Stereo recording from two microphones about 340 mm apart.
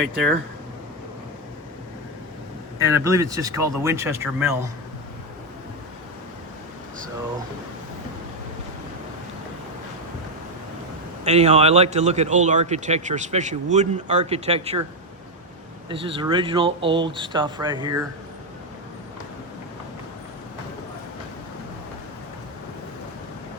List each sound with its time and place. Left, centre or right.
2.7 s speech: centre
11.3 s speech: centre
15.9 s speech: centre